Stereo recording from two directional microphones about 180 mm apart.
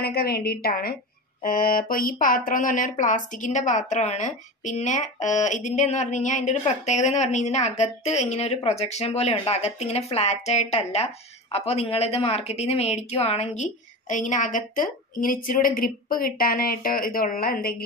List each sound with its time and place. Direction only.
0.0 s a woman's voice: 60° left (ahead or behind)